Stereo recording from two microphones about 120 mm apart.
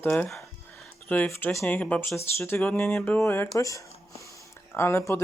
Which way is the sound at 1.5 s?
25° left (ahead or behind).